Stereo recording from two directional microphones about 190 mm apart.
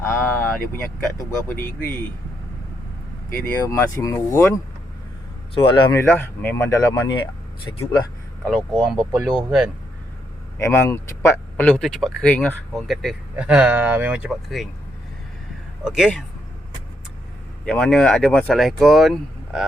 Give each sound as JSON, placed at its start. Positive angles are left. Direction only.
{"t": 0.0, "sound": "vehicle", "side_deg": 10}
{"t": 1.2, "sound": "speech", "side_deg": 15}
{"t": 3.2, "sound": "speech", "side_deg": 10}
{"t": 5.5, "sound": "speech", "side_deg": 25}
{"t": 6.0, "sound": "speech", "side_deg": 10}
{"t": 8.4, "sound": "speech", "side_deg": 0}
{"t": 10.6, "sound": "speech", "side_deg": 15}
{"t": 15.8, "sound": "speech", "side_deg": -5}
{"t": 17.7, "sound": "speech", "side_deg": 5}